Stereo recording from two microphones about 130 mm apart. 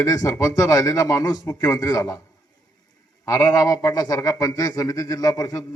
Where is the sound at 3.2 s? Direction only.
25° left (ahead or behind).